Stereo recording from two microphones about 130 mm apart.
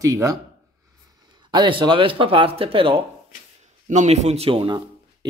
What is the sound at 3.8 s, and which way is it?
Speech, 65° right (ahead or behind).